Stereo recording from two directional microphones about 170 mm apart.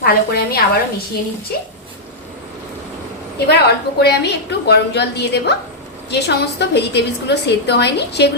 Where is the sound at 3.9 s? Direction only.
75° left (ahead or behind).